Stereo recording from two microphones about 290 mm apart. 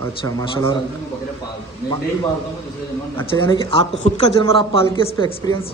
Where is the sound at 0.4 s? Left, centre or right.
Centre.